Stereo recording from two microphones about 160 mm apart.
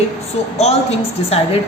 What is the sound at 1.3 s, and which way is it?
Speech, 40° left (ahead or behind).